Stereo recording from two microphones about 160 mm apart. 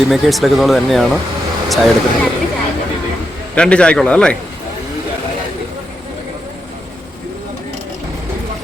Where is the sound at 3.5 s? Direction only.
5° left (ahead or behind).